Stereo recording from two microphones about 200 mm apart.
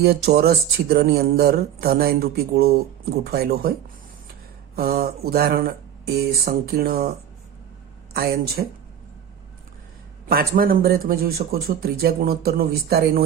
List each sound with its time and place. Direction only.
0.0 s speech: 55° right (ahead or behind)
8.1 s speech: 50° right (ahead or behind)
10.2 s speech: 45° right (ahead or behind)